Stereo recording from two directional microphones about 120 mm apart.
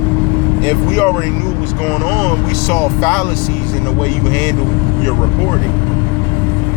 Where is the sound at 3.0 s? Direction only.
30° left (ahead or behind).